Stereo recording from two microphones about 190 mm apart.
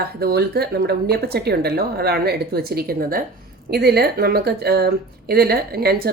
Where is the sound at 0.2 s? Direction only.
55° right (ahead or behind).